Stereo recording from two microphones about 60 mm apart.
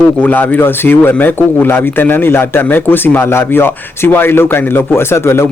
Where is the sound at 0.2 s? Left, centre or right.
Left.